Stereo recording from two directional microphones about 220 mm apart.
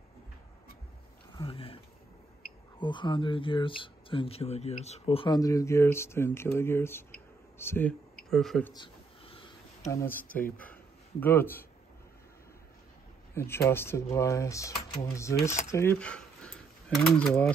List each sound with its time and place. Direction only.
1.3 s speech: 25° left (ahead or behind)
2.8 s speech: 20° left (ahead or behind); by 8.7 s 5° left (ahead or behind)
8.7 s a sound: 25° left (ahead or behind)
9.8 s speech: 10° left (ahead or behind)
13.3 s speech: 10° left (ahead or behind)